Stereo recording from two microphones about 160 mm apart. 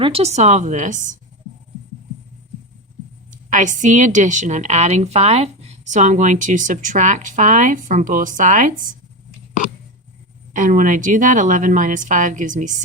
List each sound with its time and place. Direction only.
0.0 s a woman's voice: 40° right (ahead or behind)
3.2 s a woman's voice: 50° right (ahead or behind)
10.5 s a woman's voice: 55° right (ahead or behind)